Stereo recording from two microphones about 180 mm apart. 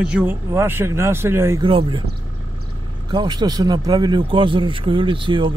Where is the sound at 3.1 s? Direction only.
25° right (ahead or behind).